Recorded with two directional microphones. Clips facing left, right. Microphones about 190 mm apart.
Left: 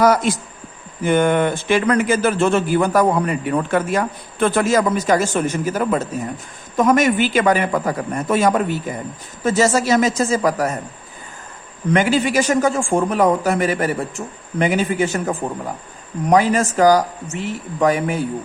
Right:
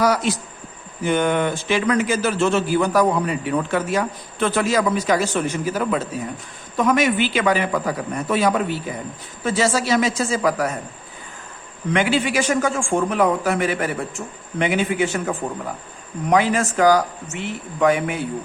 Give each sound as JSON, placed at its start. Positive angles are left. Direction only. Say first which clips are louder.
{"t": 0.0, "sound": "a man's voice", "louder": "left 4 dB", "side_deg": 50}
{"t": 11.9, "sound": "a man's voice", "louder": "left 3 dB", "side_deg": 45}